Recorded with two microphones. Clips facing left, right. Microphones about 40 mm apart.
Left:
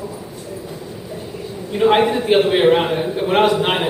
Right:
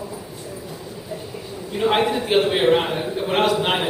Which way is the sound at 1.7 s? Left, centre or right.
Centre.